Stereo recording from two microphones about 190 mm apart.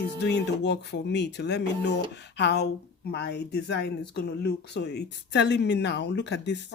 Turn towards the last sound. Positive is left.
turn(degrees=65)  # may be behind; listen again after turning